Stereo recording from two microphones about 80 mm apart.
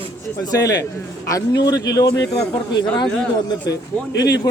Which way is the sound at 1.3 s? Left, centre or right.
Left.